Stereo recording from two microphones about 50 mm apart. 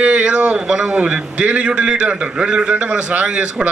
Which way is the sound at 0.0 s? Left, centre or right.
Right.